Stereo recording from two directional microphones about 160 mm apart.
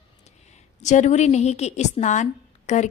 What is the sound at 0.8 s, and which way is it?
A woman's voice, 45° left (ahead or behind).